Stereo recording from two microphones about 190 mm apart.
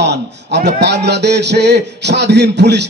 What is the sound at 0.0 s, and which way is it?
Speech, 60° right (ahead or behind).